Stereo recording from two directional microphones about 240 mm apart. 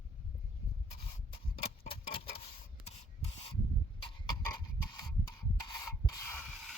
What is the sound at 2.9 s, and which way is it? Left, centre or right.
Rub, left.